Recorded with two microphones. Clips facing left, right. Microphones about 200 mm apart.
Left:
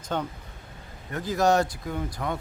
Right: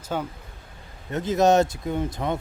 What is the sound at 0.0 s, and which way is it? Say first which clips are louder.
Speech: right 1 dB; 5° right (ahead or behind).